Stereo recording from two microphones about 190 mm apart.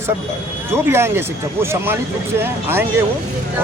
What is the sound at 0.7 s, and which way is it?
Speech, 15° right (ahead or behind).